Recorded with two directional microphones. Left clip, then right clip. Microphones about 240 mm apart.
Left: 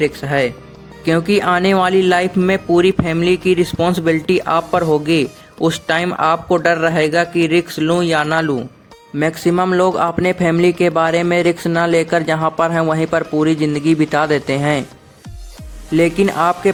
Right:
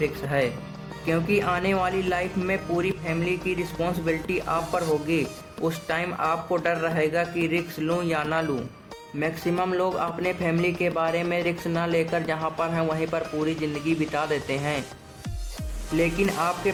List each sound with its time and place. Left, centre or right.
0.0 s a man's voice: left
5.6 s a man's voice: left
16.0 s a man's voice: left